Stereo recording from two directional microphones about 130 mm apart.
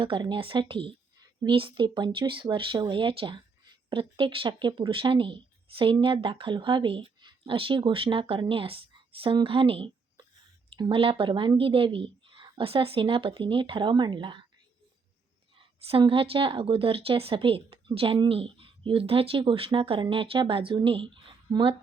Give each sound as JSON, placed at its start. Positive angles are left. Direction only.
{"t": 0.0, "sound": "a woman's voice", "side_deg": -40}
{"t": 15.9, "sound": "speech", "side_deg": -45}